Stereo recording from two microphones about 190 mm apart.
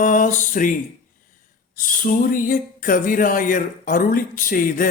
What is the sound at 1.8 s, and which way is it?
Speech, 45° left (ahead or behind).